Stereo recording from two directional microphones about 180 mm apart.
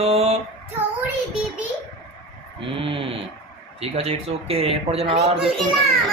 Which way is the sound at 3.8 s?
35° right (ahead or behind).